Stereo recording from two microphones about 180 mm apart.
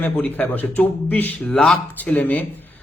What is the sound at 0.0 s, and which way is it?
Speech, 10° left (ahead or behind).